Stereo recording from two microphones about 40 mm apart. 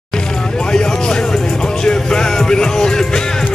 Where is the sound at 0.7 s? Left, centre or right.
Centre.